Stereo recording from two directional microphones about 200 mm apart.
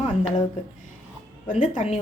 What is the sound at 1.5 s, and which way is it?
Speech, 40° left (ahead or behind).